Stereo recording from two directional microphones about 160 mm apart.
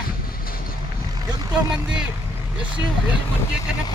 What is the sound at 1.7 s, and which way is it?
Speech, 5° right (ahead or behind).